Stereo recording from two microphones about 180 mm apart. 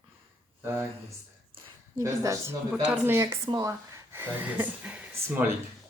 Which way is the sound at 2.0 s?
15° right (ahead or behind).